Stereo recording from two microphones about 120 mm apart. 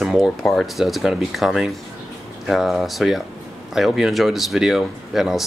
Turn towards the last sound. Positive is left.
turn(degrees=-5)  # may be behind; listen again after turning